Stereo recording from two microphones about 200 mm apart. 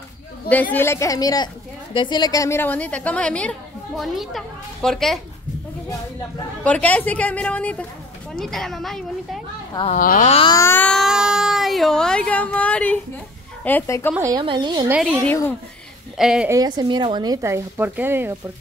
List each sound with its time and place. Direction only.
0.5 s a woman's voice: 10° left (ahead or behind)
6.6 s a woman's voice: 5° left (ahead or behind)
9.9 s speech: 45° left (ahead or behind)
10.3 s a sound: 25° left (ahead or behind)
10.6 s a woman's voice: 10° left (ahead or behind)
14.1 s speech: 15° right (ahead or behind)
14.9 s a woman's voice: centre (ahead or behind)
16.5 s speech: 20° right (ahead or behind)